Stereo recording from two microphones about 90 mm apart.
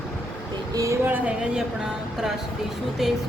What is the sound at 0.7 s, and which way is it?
Speech, 35° right (ahead or behind).